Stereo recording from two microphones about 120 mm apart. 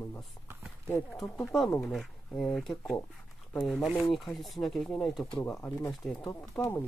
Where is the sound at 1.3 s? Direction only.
Centre (ahead or behind).